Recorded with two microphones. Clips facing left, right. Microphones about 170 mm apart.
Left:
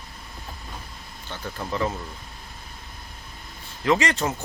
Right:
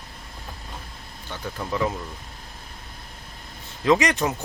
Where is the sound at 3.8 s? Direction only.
15° right (ahead or behind).